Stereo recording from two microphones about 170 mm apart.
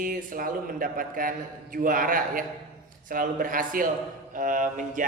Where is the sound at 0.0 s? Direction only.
55° right (ahead or behind).